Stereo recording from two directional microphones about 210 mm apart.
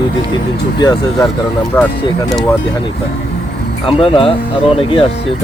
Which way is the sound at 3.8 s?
25° left (ahead or behind).